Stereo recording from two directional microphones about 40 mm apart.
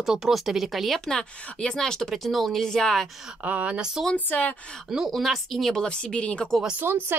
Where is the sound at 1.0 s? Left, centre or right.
Centre.